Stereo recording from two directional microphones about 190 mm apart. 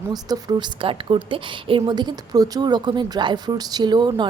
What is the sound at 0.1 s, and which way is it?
A woman's voice, 20° right (ahead or behind).